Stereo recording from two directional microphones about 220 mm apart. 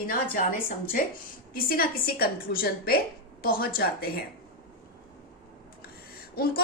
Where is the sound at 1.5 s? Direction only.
40° left (ahead or behind).